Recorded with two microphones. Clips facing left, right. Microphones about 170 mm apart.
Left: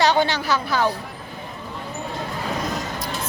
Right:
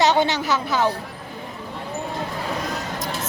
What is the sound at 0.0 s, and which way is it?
Speech, 20° right (ahead or behind).